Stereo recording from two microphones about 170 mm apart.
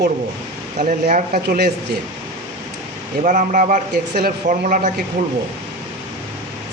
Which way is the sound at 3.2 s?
50° right (ahead or behind).